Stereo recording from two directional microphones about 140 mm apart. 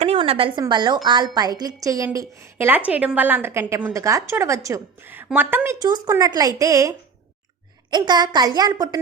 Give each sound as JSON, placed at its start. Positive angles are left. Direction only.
{"t": 0.0, "sound": "a sound", "side_deg": -45}
{"t": 0.7, "sound": "a woman's voice", "side_deg": -30}
{"t": 5.8, "sound": "a woman's voice", "side_deg": -25}